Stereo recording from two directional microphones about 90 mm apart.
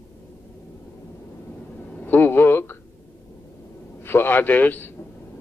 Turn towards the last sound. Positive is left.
turn(degrees=20)  # may be behind; listen again after turning